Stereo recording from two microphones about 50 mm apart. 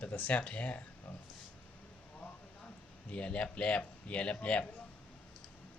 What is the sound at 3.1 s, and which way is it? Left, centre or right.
Speech, left.